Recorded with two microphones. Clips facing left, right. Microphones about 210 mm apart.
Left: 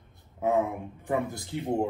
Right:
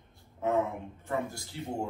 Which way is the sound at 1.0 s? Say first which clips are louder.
Left 5 dB; 15° left (ahead or behind).